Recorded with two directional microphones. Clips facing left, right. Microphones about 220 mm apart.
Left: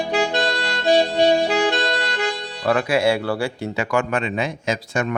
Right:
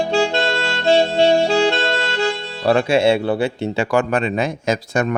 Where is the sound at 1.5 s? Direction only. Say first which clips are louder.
Right 3 dB; 25° right (ahead or behind).